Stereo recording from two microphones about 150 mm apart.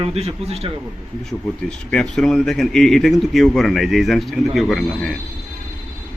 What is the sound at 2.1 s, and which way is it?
A man's voice, 5° left (ahead or behind).